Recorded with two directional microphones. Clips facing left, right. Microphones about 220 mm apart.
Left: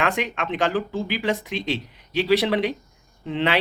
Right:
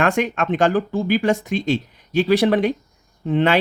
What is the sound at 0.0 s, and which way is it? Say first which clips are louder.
Speech: right 5 dB; 45° right (ahead or behind).